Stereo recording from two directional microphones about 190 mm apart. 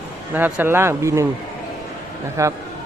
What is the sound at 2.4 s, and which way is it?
Speech, 15° right (ahead or behind).